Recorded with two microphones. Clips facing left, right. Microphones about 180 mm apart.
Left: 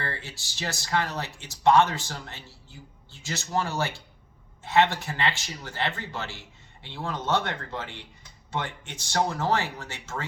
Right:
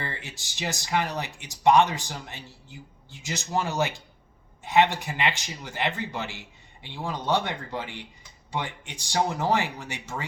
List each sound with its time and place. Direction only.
0.0 s speech: 15° right (ahead or behind)